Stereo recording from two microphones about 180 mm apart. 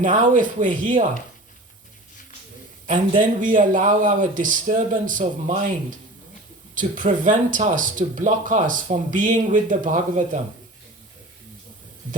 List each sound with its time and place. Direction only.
0.0 s a man's voice: 45° right (ahead or behind)
3.2 s a man's voice: 45° right (ahead or behind)
6.7 s a man's voice: 45° right (ahead or behind)